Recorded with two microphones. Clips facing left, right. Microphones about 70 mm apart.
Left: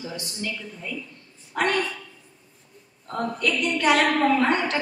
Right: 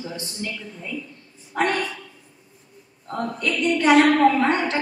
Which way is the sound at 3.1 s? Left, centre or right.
Right.